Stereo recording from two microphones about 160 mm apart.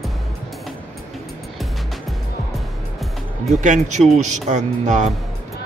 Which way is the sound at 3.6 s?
50° right (ahead or behind).